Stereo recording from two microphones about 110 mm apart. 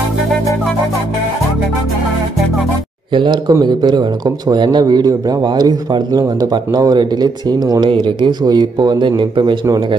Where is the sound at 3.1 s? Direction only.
45° right (ahead or behind).